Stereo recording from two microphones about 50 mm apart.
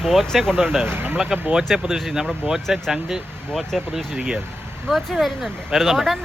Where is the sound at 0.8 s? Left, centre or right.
Right.